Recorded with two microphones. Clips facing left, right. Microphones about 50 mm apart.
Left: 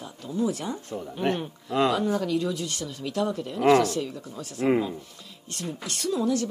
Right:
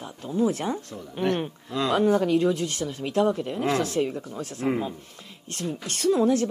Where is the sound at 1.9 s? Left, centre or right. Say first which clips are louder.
Right 5 dB; right.